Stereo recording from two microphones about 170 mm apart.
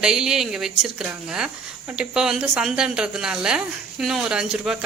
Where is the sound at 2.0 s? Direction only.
5° right (ahead or behind).